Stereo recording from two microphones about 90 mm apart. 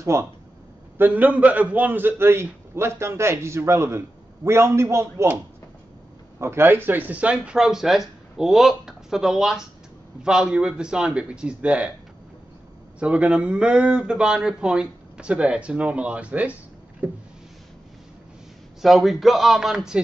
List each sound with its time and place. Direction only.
0.0 s speech: 30° right (ahead or behind)
0.9 s a man's voice: 20° right (ahead or behind)
6.4 s speech: 25° right (ahead or behind)
13.0 s speech: 10° right (ahead or behind)
18.8 s speech: centre (ahead or behind)